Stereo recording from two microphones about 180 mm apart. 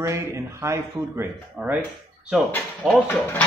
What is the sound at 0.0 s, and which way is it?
Speech, 15° right (ahead or behind).